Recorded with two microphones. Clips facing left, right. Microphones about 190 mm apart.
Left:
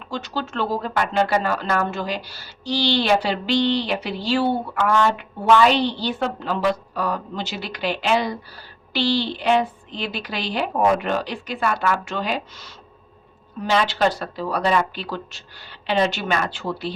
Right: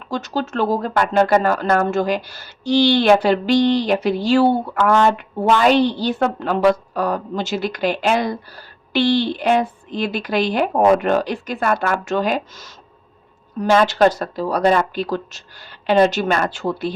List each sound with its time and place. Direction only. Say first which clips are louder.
0.1 s speech: right 5 dB; 45° right (ahead or behind)